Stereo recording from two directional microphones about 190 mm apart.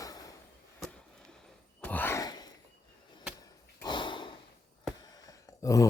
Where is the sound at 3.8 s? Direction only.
25° left (ahead or behind).